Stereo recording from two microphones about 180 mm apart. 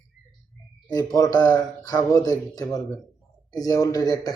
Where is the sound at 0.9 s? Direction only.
20° left (ahead or behind).